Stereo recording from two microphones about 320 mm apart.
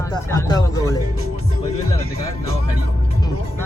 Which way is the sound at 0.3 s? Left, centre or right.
Centre.